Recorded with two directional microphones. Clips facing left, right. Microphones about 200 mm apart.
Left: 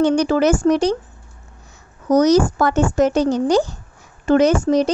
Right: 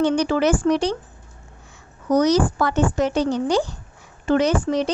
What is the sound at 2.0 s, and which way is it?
A child's voice, 45° left (ahead or behind).